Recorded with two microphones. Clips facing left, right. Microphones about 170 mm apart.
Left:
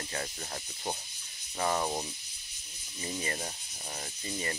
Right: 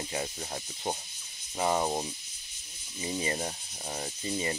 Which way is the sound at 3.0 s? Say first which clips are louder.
Right 4 dB; 15° right (ahead or behind).